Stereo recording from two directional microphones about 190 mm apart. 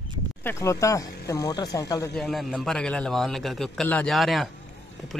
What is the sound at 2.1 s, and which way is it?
Speech, centre (ahead or behind).